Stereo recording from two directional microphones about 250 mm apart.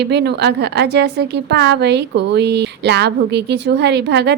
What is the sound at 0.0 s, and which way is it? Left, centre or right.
A woman's voice, right.